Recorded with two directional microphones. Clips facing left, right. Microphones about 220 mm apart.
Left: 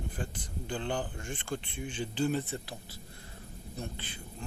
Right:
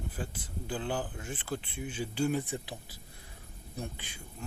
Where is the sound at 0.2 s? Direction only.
5° right (ahead or behind).